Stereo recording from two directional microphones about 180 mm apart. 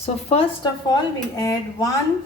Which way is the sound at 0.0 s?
35° left (ahead or behind).